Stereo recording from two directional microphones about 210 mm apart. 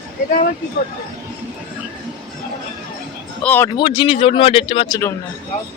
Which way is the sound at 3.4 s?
10° left (ahead or behind).